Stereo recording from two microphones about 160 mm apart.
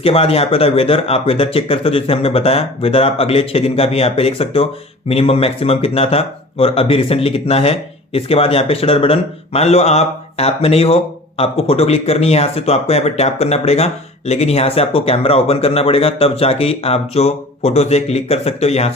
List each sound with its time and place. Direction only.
0.0 s speech: 35° left (ahead or behind)